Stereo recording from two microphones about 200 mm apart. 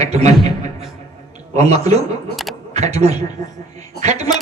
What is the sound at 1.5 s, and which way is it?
A man's voice, 35° right (ahead or behind).